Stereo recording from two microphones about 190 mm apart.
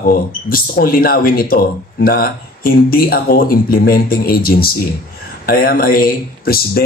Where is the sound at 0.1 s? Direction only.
50° left (ahead or behind).